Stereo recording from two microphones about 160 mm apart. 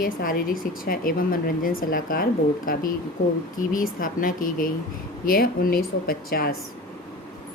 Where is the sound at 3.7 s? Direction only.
60° left (ahead or behind).